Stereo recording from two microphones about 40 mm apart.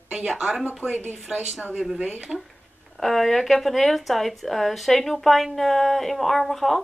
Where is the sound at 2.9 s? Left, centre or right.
Centre.